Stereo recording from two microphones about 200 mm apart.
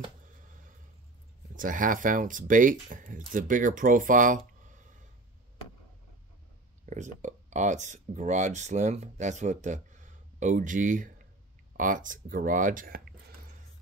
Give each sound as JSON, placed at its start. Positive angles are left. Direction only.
{"t": 1.5, "sound": "speech", "side_deg": -40}
{"t": 6.9, "sound": "speech", "side_deg": -35}